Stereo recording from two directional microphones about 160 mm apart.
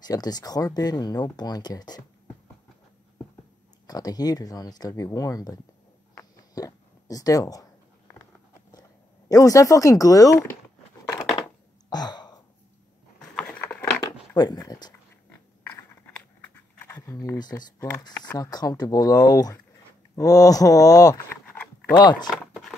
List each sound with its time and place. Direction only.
0.1 s speech: 25° left (ahead or behind)
3.8 s speech: 25° left (ahead or behind)
9.3 s speech: 20° left (ahead or behind)
11.9 s a sound: 25° left (ahead or behind)
13.4 s patter: 10° left (ahead or behind)
14.3 s speech: 25° left (ahead or behind)
16.5 s a sound: 15° left (ahead or behind)
18.0 s speech: 25° left (ahead or behind)
22.3 s a sound: centre (ahead or behind)